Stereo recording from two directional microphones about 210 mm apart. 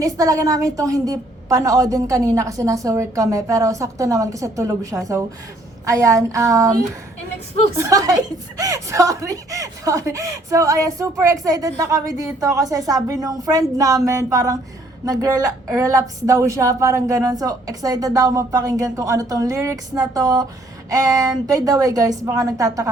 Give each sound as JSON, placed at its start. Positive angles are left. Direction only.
{"t": 0.0, "sound": "speech", "side_deg": -15}
{"t": 7.8, "sound": "speech", "side_deg": -15}